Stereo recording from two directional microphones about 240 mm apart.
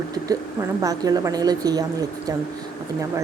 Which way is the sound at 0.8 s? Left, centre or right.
Centre.